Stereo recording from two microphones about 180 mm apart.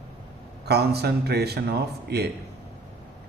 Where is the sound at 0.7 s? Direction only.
65° right (ahead or behind).